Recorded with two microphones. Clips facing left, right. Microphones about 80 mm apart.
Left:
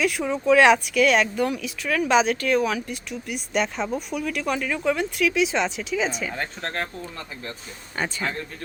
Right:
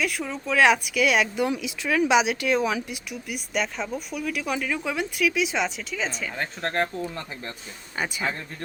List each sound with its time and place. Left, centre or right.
0.0 s speech: centre
1.5 s speech: centre
3.2 s speech: centre
6.7 s speech: right
7.9 s speech: centre